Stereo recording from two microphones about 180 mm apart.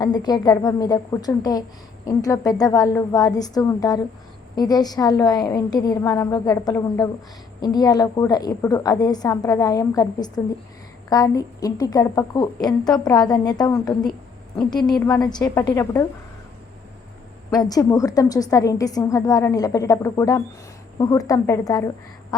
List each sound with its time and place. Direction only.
0.0 s a woman's voice: 25° left (ahead or behind)
17.5 s a woman's voice: 20° left (ahead or behind)